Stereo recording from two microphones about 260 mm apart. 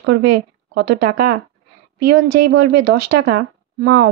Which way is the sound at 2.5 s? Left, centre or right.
Right.